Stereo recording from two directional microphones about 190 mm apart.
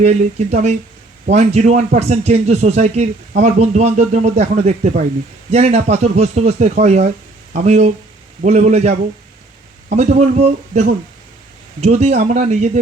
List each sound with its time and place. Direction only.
0.0 s speech: 35° right (ahead or behind)